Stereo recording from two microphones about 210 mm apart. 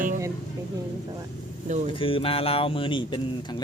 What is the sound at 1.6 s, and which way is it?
Speech, 35° right (ahead or behind).